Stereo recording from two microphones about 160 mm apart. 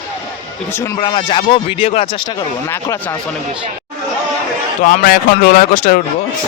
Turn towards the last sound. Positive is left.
turn(degrees=55)  # may be behind; listen again after turning